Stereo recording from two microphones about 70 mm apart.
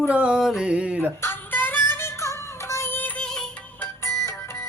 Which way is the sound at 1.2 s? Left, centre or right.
Left.